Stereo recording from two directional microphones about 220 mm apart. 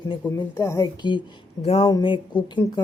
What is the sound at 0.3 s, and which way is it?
A woman's voice, 10° left (ahead or behind).